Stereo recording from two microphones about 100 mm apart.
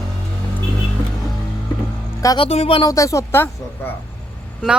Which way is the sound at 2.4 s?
90° left.